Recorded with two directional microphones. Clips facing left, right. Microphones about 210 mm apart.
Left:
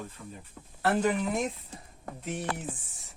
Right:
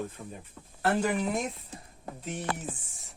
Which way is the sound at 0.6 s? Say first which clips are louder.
Left 1 dB; 5° left (ahead or behind).